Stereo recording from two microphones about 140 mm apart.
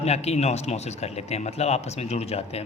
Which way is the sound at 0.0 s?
50° left (ahead or behind).